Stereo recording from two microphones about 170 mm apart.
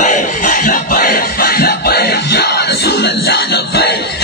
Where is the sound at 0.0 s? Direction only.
45° left (ahead or behind).